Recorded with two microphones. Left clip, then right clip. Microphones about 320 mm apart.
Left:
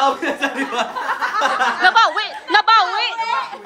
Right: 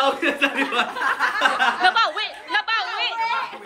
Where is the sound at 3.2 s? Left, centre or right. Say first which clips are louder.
Left 3 dB; left.